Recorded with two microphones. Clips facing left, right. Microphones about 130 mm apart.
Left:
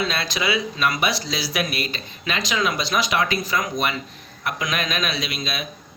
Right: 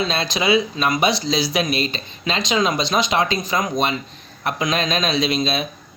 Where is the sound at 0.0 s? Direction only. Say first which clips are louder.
Right 3 dB; 25° right (ahead or behind).